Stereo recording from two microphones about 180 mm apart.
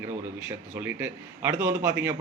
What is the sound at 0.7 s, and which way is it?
Speech, 10° right (ahead or behind).